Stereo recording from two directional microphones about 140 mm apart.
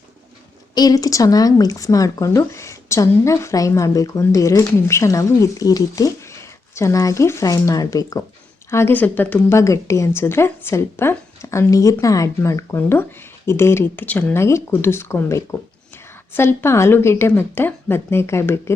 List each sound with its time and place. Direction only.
0.7 s speech: 30° left (ahead or behind)